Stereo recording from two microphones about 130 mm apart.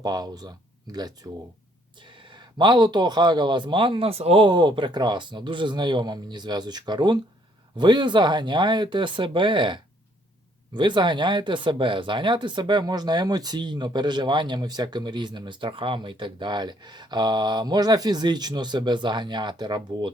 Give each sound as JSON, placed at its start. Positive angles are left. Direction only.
{"t": 0.0, "sound": "speech", "side_deg": -30}